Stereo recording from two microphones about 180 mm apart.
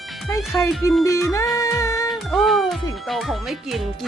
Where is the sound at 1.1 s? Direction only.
15° left (ahead or behind).